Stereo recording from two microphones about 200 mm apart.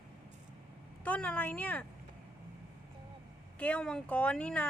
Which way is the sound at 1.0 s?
5° left (ahead or behind).